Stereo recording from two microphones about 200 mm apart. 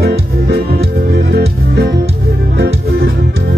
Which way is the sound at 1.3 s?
55° right (ahead or behind).